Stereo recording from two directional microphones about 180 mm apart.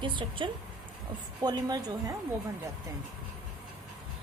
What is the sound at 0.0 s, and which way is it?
A woman's voice, 25° right (ahead or behind).